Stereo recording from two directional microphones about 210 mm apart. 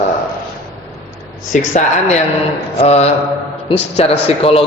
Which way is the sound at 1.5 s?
35° left (ahead or behind).